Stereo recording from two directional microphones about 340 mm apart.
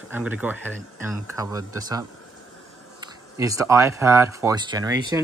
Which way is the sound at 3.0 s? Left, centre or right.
Centre.